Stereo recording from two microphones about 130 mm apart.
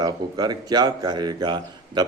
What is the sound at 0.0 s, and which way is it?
Speech, 30° right (ahead or behind).